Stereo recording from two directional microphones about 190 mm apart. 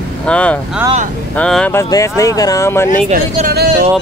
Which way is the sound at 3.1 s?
55° right (ahead or behind).